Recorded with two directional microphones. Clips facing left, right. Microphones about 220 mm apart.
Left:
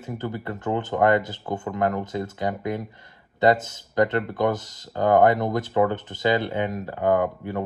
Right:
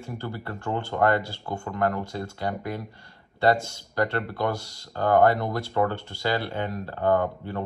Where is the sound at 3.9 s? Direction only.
20° left (ahead or behind).